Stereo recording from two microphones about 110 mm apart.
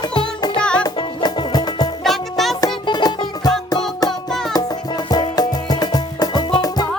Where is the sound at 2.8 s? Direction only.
40° left (ahead or behind).